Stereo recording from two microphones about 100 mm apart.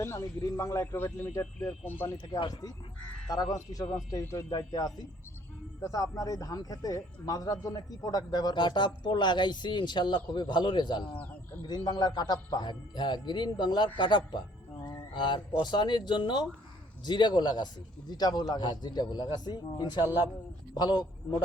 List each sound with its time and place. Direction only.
0.0 s a man's voice: 30° left (ahead or behind)
2.5 s speech: 40° left (ahead or behind)
4.4 s speech: 45° left (ahead or behind)